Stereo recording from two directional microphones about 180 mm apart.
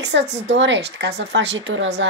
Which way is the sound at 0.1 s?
80° right.